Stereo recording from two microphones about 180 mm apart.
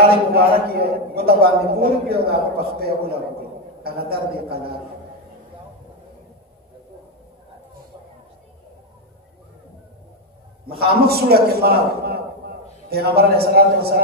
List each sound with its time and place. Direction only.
0.3 s a man's voice: 60° right (ahead or behind)
10.7 s a man's voice: 60° right (ahead or behind)